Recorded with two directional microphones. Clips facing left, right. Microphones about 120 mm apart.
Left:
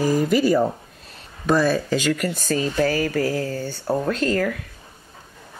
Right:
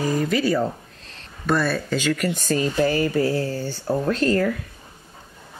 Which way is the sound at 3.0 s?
15° right (ahead or behind).